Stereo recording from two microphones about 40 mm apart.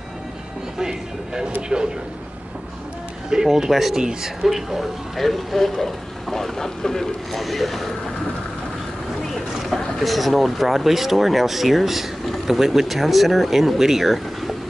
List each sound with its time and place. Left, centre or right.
0.7 s speech: centre
3.3 s speech: centre
4.4 s speech: centre
9.3 s a sound: centre
9.9 s speech: centre